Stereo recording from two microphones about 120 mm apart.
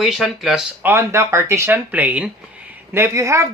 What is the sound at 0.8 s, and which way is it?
Speech, 20° right (ahead or behind).